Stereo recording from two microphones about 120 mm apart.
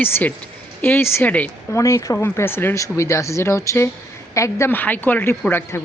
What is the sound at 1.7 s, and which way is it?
A woman's voice, 25° left (ahead or behind).